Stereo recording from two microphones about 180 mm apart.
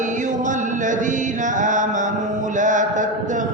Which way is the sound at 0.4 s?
45° right (ahead or behind).